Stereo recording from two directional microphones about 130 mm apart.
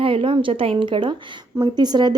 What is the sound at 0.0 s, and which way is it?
A woman's voice, 40° right (ahead or behind).